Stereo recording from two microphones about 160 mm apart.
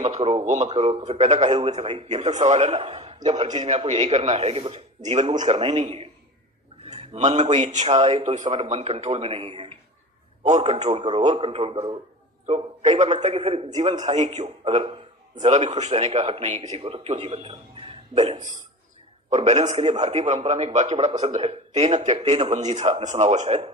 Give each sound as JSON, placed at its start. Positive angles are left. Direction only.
{"t": 0.0, "sound": "a man's voice", "side_deg": -40}
{"t": 21.1, "sound": "speech", "side_deg": -30}
{"t": 21.3, "sound": "speech", "side_deg": -45}